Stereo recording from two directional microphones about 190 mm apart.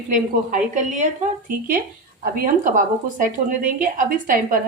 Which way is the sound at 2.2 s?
45° right (ahead or behind).